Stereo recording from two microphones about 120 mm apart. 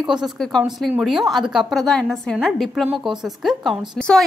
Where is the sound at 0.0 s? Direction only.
5° right (ahead or behind).